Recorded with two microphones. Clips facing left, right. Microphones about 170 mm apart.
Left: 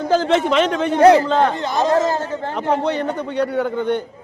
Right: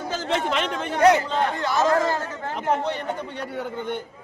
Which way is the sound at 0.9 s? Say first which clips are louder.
Left 6 dB; 30° left (ahead or behind).